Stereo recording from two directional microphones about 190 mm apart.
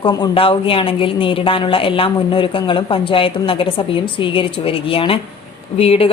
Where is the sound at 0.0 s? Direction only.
25° left (ahead or behind).